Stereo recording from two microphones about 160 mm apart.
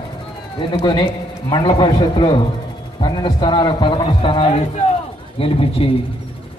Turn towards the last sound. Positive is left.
turn(degrees=35)  # may be behind; listen again after turning